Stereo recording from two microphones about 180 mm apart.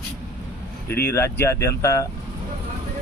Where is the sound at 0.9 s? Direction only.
10° left (ahead or behind).